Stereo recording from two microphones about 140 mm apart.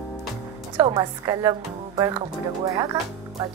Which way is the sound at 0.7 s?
30° right (ahead or behind).